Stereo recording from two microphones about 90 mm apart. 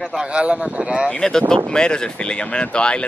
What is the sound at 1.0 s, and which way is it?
Speech, 10° left (ahead or behind).